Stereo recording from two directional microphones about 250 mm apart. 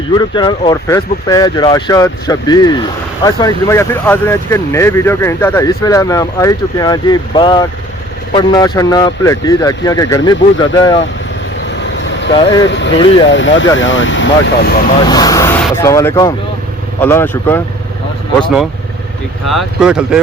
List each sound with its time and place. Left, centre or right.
0.1 s speech: centre
11.7 s vehicle: left
12.3 s speech: centre
12.6 s speech: left
15.0 s speech: centre
19.5 s speech: centre